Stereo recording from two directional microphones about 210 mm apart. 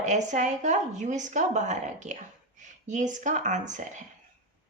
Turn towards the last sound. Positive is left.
turn(degrees=-35)  # may be behind; listen again after turning